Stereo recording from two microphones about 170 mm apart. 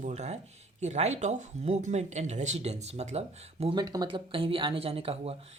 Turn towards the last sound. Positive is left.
turn(degrees=-35)  # may be behind; listen again after turning